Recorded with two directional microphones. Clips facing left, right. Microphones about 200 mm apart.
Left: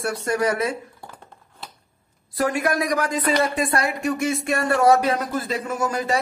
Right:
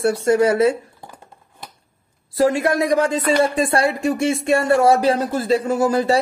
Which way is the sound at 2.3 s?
25° right (ahead or behind).